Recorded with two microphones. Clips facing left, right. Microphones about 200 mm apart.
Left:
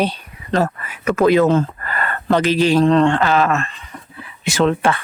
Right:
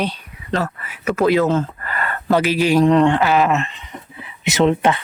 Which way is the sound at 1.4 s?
60° left (ahead or behind).